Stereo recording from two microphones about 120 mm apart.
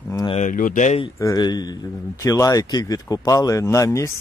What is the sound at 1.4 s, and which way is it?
Speech, 35° left (ahead or behind).